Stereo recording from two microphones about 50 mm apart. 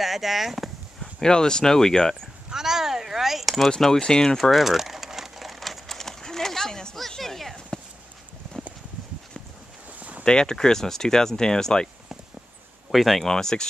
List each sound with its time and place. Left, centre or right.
0.0 s speech: centre
1.2 s speech: centre
2.5 s a sound: centre
3.6 s speech: centre
4.4 s crumpling: centre
7.0 s a sound: centre
9.9 s a sound: right
10.2 s speech: centre
12.9 s speech: centre
13.3 s speech: centre